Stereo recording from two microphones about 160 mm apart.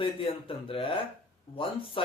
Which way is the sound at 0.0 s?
35° left (ahead or behind).